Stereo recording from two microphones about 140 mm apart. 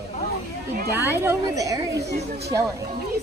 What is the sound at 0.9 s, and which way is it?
Speech, 15° right (ahead or behind).